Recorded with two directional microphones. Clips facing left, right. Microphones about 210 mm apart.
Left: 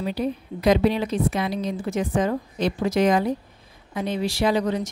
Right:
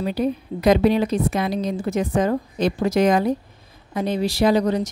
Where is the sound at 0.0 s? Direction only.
45° right (ahead or behind).